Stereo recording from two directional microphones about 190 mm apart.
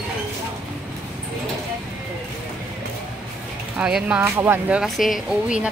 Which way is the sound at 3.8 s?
5° right (ahead or behind).